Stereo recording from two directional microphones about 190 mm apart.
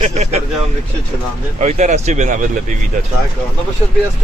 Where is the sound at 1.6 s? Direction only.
40° right (ahead or behind).